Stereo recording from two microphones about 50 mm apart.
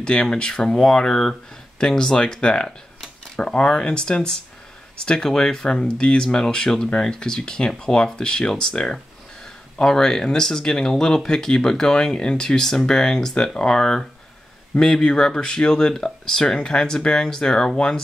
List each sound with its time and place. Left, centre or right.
0.0 s speech: centre